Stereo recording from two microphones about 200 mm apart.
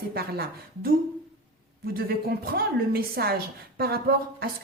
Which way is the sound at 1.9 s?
50° right (ahead or behind).